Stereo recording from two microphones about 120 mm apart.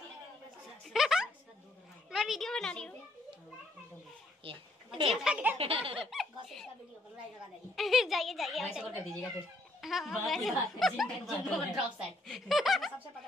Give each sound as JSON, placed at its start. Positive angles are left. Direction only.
{"t": 0.8, "sound": "a sound", "side_deg": -5}
{"t": 2.0, "sound": "a child's voice", "side_deg": 0}
{"t": 4.5, "sound": "a sound", "side_deg": -50}
{"t": 5.1, "sound": "speech", "side_deg": -5}
{"t": 5.6, "sound": "baby laughter", "side_deg": -50}
{"t": 6.0, "sound": "giggle", "side_deg": 0}
{"t": 7.7, "sound": "speech", "side_deg": 0}